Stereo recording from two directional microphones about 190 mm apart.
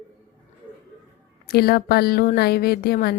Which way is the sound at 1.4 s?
55° left (ahead or behind).